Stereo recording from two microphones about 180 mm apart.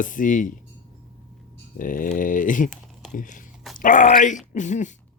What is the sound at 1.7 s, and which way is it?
Speech, 50° left (ahead or behind).